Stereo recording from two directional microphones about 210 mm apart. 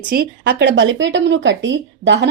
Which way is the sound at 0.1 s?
50° right (ahead or behind).